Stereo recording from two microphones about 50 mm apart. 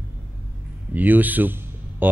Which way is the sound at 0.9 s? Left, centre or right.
Right.